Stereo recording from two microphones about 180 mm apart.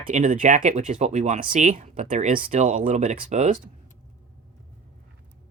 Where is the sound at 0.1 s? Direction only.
45° right (ahead or behind).